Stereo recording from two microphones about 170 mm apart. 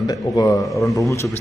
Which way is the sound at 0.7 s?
Centre (ahead or behind).